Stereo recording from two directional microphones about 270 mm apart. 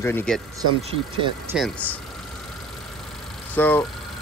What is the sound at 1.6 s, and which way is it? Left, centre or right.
Speech, centre.